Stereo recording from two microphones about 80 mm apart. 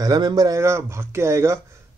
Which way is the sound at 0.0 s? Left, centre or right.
Right.